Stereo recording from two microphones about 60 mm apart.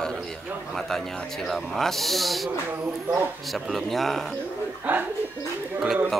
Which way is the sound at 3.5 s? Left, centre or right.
Centre.